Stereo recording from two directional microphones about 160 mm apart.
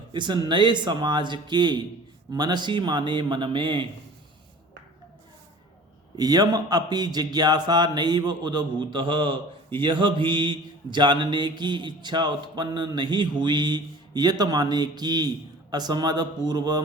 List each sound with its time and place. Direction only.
0.1 s a man's voice: 30° right (ahead or behind)
6.1 s a man's voice: 25° right (ahead or behind)